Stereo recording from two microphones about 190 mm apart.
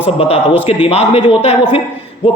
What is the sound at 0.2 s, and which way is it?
A man's voice, 30° left (ahead or behind).